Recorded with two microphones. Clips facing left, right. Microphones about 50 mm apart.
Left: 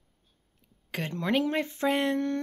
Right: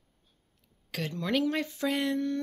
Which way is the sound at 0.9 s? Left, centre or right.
Left.